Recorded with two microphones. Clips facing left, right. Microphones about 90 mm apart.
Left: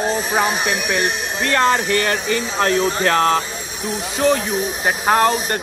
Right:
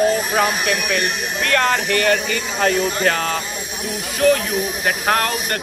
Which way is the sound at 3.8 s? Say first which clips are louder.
Right 1 dB; 30° left (ahead or behind).